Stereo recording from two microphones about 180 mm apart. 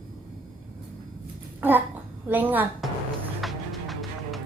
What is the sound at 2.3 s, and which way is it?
Speech, 10° right (ahead or behind).